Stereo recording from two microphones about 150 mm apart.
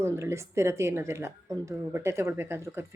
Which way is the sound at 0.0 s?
20° right (ahead or behind).